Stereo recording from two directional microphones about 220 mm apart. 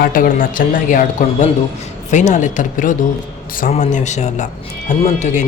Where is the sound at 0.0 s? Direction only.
40° left (ahead or behind).